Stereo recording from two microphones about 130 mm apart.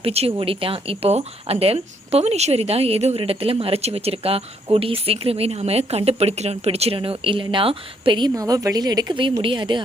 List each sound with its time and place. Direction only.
0.0 s a woman's voice: 50° right (ahead or behind)